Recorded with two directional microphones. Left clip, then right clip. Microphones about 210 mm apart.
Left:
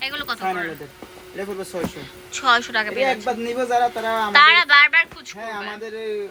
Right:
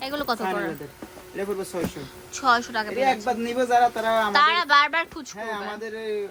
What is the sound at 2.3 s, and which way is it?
A woman's voice, 15° right (ahead or behind).